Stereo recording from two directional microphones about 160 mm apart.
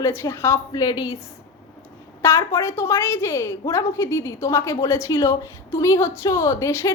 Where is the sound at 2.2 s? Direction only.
15° left (ahead or behind).